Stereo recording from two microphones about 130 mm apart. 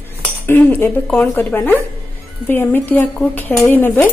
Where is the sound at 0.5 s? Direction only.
15° left (ahead or behind).